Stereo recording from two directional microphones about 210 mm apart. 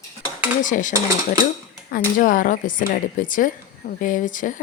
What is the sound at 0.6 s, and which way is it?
Speech, 35° left (ahead or behind).